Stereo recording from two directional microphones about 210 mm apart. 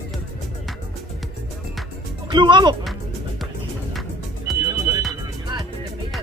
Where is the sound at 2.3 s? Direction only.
20° right (ahead or behind).